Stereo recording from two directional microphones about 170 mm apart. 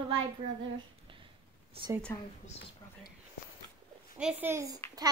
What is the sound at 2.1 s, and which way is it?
Speech, 20° left (ahead or behind).